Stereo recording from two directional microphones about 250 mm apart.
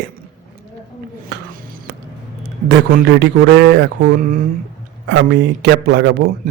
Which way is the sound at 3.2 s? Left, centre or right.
Right.